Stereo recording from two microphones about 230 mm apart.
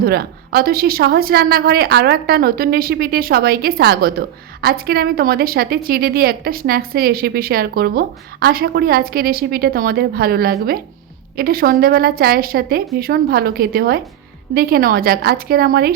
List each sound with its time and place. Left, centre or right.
0.0 s a woman's voice: right